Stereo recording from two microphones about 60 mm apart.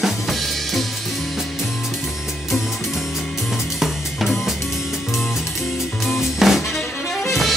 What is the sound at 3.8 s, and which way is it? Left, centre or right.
Drum kit, centre.